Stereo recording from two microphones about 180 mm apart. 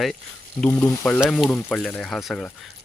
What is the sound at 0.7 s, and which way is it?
Frying, 20° left (ahead or behind).